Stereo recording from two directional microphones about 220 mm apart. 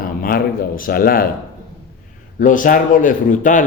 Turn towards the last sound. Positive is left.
turn(degrees=35)  # may be behind; listen again after turning